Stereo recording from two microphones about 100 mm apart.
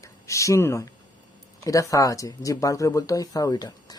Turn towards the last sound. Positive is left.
turn(degrees=40)  # may be behind; listen again after turning